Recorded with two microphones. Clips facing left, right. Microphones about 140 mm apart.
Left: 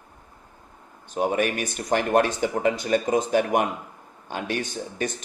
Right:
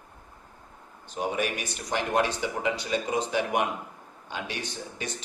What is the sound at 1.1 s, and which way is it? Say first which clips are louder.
A man's voice: left 6 dB; 50° left (ahead or behind).